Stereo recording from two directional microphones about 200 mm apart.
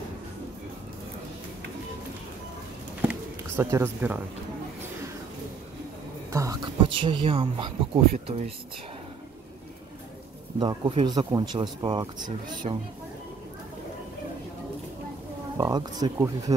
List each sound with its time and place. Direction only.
3.0 s chop: 10° right (ahead or behind)
6.3 s speech: 15° right (ahead or behind)
10.6 s speech: 20° right (ahead or behind)
15.5 s speech: 20° right (ahead or behind)